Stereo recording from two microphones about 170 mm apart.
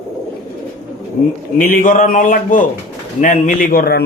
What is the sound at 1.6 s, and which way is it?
A man's voice, 55° left (ahead or behind).